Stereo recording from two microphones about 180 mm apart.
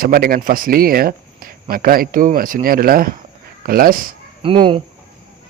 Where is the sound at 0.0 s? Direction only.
55° right (ahead or behind).